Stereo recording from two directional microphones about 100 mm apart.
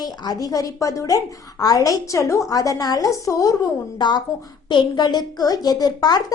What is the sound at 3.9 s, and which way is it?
A woman's voice, 45° left (ahead or behind).